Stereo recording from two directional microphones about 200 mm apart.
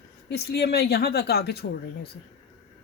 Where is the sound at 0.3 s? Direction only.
55° left (ahead or behind).